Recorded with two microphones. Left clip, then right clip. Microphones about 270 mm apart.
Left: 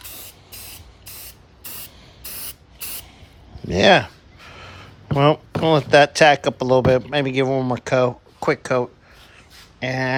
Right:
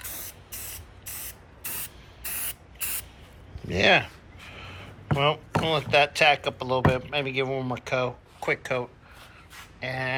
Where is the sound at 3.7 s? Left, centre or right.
Centre.